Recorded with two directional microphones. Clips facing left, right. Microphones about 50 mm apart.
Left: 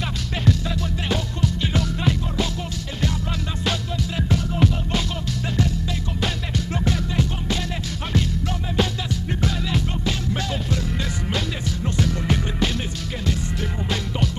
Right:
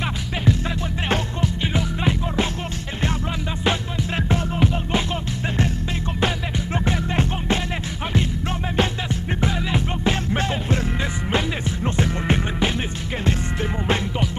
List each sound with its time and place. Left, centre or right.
1.6 s music: right
3.6 s music: right
6.2 s music: right
9.4 s music: right